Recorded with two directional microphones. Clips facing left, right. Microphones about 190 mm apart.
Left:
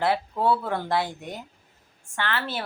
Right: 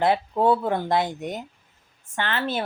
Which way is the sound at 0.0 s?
20° right (ahead or behind).